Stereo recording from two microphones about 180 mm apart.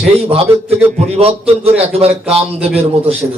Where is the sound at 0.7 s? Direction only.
35° right (ahead or behind).